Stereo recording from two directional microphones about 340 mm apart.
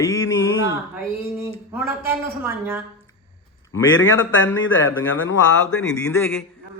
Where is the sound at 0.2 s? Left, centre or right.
Left.